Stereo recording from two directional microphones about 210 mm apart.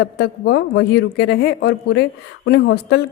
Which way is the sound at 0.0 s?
55° left (ahead or behind).